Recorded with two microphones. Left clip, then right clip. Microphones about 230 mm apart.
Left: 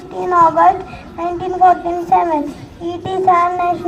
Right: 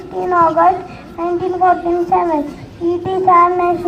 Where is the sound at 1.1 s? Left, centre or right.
Left.